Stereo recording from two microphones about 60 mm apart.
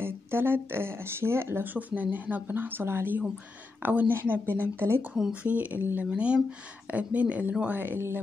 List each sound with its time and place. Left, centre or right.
0.0 s speech: right
5.3 s speech: right
6.0 s speech: centre